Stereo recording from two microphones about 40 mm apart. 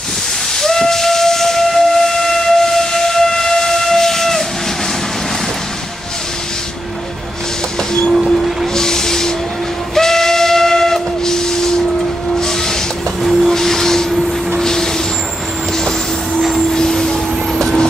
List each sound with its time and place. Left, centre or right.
0.6 s steam whistle: centre
8.1 s train: centre
8.7 s a sound: centre
9.9 s train: centre
12.4 s a sound: centre
13.2 s train: centre
13.5 s a sound: centre
14.6 s vehicle: centre
16.3 s vehicle: centre
16.7 s vehicle: centre